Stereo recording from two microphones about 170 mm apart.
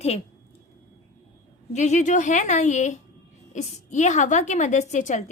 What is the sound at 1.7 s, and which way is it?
A woman's voice, 45° left (ahead or behind).